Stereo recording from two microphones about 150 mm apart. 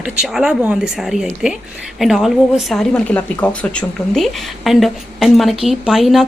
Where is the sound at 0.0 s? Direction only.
5° right (ahead or behind).